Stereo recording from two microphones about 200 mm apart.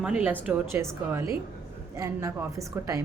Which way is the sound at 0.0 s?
5° right (ahead or behind).